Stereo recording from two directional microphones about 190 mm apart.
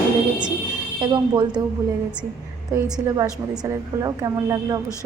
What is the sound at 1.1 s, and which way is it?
Speech, 25° right (ahead or behind).